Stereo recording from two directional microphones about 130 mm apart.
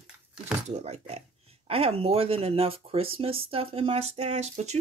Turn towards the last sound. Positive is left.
turn(degrees=-60)  # may be behind; listen again after turning